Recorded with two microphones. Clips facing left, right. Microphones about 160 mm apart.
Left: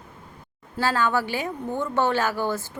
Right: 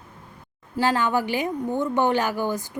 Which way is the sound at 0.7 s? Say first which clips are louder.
Right 1 dB; 15° right (ahead or behind).